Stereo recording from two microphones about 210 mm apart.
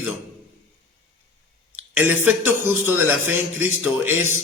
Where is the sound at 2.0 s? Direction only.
10° right (ahead or behind).